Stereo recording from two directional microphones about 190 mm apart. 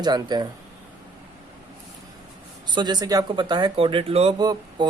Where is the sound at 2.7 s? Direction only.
25° right (ahead or behind).